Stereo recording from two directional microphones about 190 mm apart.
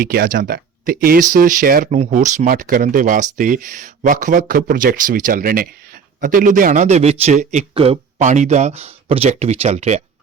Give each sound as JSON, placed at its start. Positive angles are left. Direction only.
{"t": 0.0, "sound": "speech", "side_deg": -50}